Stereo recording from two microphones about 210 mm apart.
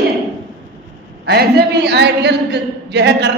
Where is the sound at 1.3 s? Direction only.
50° right (ahead or behind).